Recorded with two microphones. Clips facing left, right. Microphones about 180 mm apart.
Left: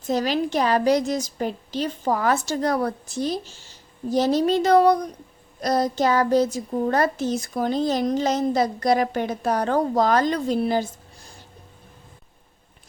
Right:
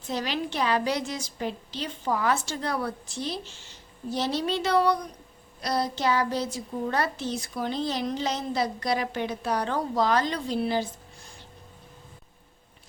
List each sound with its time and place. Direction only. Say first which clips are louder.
0.0 s a child's voice: left 7 dB; 45° left (ahead or behind)